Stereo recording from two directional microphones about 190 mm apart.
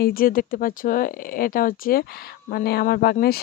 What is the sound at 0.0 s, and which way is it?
Speech, 50° left (ahead or behind).